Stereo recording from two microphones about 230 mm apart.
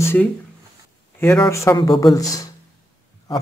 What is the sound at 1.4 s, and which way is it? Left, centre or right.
Speech, centre.